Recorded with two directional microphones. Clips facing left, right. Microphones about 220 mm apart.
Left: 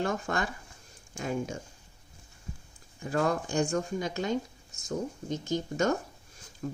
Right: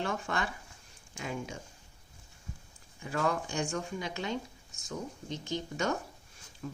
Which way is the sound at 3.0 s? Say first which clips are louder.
Left 4 dB; 40° left (ahead or behind).